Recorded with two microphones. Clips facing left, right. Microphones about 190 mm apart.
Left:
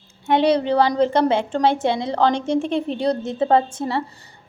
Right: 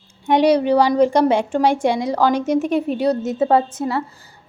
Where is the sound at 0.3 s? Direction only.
15° right (ahead or behind).